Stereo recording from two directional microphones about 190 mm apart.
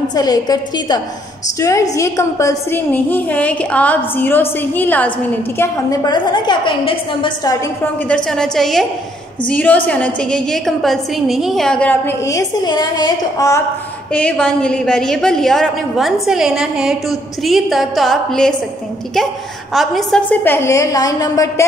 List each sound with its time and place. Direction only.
0.1 s a woman's voice: 20° left (ahead or behind)
5.6 s a woman's voice: 20° left (ahead or behind)
7.8 s a woman's voice: 5° left (ahead or behind)
14.1 s a woman's voice: 5° left (ahead or behind)
19.7 s a woman's voice: centre (ahead or behind); by 21.6 s 20° left (ahead or behind)